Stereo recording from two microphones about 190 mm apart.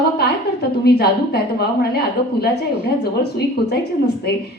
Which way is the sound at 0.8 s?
60° left (ahead or behind).